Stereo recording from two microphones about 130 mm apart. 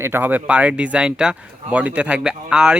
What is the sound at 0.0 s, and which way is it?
Speech, 15° right (ahead or behind).